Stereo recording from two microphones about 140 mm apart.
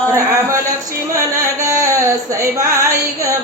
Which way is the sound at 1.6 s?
20° right (ahead or behind).